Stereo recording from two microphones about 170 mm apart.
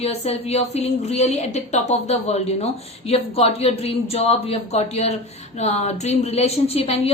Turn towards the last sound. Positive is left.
turn(degrees=35)  # may be behind; listen again after turning